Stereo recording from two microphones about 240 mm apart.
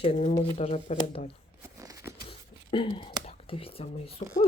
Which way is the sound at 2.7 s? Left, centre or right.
Left.